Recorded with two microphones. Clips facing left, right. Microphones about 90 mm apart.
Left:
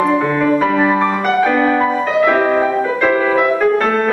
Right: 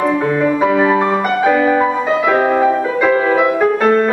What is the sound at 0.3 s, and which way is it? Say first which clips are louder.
Music: even; 10° right (ahead or behind).